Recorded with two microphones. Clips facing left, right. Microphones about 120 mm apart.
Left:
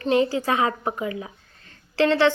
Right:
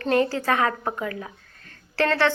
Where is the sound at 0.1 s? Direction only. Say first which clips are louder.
Left 1 dB; 15° left (ahead or behind).